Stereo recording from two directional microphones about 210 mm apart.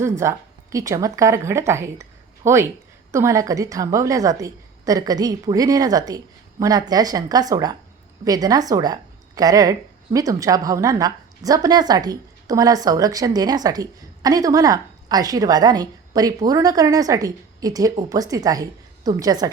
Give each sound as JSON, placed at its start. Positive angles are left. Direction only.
{"t": 0.0, "sound": "a woman's voice", "side_deg": -15}